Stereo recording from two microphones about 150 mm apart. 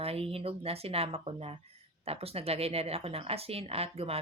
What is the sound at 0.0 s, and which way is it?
Speech, 40° right (ahead or behind).